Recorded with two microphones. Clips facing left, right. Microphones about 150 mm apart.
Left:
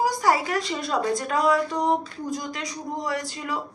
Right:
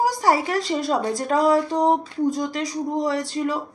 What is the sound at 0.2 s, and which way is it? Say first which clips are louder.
A woman's voice: right 2 dB; 30° right (ahead or behind).